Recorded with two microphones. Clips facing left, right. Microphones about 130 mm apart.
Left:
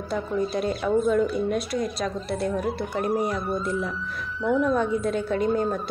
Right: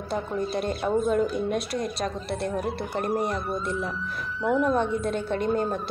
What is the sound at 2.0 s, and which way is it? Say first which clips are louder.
A woman's voice: left 2 dB; centre (ahead or behind).